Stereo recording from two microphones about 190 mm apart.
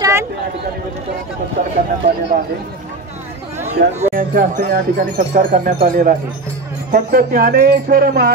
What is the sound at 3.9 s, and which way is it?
Speech, 40° right (ahead or behind).